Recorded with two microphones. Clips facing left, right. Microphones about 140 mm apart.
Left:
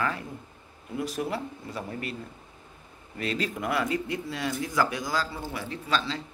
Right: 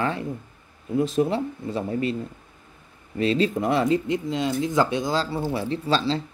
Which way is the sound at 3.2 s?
25° right (ahead or behind).